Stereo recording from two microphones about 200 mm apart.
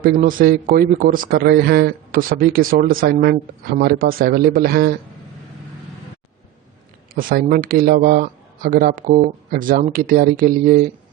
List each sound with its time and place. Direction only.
0.0 s a man's voice: 45° right (ahead or behind)
7.1 s a man's voice: 45° right (ahead or behind)